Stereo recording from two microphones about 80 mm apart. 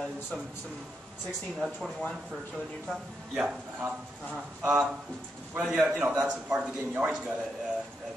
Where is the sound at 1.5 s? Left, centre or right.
Centre.